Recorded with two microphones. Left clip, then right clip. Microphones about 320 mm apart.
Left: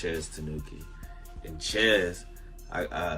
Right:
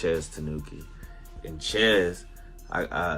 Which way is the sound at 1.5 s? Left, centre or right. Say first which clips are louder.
Right 2 dB; centre.